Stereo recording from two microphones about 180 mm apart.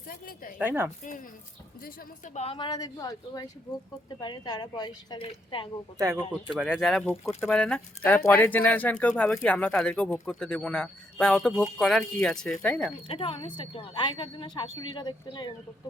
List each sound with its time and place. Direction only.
0.1 s speech: 55° left (ahead or behind)
0.6 s speech: 10° right (ahead or behind)
1.8 s a woman's voice: 40° left (ahead or behind)
6.0 s speech: 15° right (ahead or behind)
6.5 s speech: centre (ahead or behind)
13.1 s a woman's voice: 30° left (ahead or behind)